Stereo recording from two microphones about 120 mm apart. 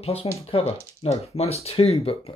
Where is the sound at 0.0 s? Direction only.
55° left (ahead or behind).